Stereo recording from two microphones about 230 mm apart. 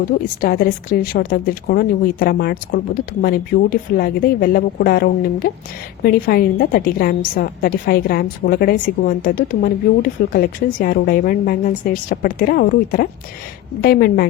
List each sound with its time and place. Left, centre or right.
0.1 s a woman's voice: left